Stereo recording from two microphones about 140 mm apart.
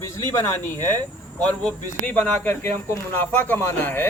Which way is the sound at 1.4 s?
10° left (ahead or behind).